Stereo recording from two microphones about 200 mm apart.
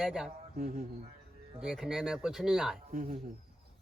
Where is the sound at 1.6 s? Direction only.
5° right (ahead or behind).